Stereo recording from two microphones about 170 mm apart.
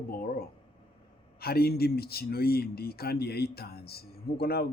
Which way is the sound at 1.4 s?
65° left (ahead or behind).